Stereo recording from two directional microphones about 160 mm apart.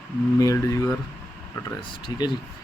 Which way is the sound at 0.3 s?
20° left (ahead or behind).